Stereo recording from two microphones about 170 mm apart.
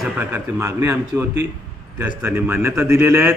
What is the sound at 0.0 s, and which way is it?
A man's voice, 10° right (ahead or behind).